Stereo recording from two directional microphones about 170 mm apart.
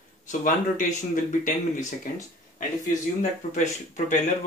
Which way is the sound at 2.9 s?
45° left (ahead or behind).